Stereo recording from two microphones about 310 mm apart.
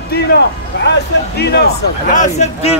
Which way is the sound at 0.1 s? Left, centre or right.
Left.